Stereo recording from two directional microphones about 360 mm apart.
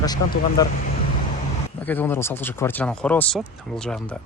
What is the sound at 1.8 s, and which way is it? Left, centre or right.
Speech, centre.